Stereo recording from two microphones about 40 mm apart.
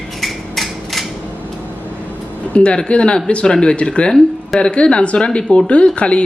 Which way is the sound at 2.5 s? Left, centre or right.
Left.